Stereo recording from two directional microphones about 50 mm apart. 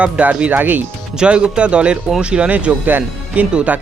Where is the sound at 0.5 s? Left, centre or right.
Right.